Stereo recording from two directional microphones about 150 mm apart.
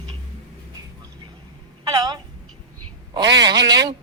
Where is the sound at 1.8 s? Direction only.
25° right (ahead or behind).